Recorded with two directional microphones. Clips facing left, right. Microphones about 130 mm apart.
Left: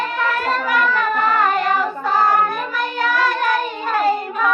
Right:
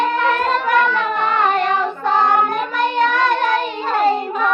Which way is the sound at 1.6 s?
5° left (ahead or behind).